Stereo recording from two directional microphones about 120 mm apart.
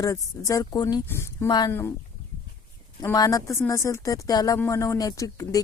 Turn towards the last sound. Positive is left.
turn(degrees=25)  # may be behind; listen again after turning